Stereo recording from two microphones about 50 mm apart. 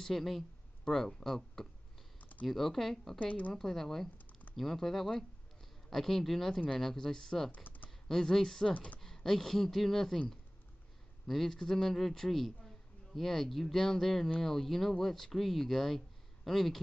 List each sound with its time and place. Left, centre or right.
0.0 s speech: centre
2.1 s typing: left
2.4 s a man's voice: centre
3.2 s a woman's voice: left
3.5 s speech: centre
4.3 s typing: left
4.6 s speech: centre
7.5 s typing: left
8.1 s speech: centre
8.7 s speech: left
9.0 s a man's voice: centre